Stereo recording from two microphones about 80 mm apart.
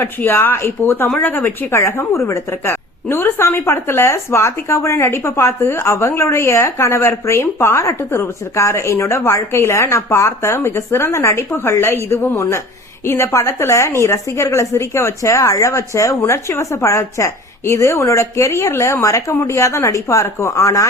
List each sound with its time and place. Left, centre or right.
0.0 s a woman's voice: left